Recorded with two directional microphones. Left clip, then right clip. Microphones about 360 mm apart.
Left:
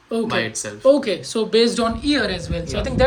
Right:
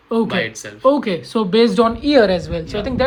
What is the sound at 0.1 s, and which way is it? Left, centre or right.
Speech, centre.